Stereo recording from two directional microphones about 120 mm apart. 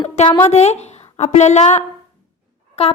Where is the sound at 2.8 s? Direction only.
55° left (ahead or behind).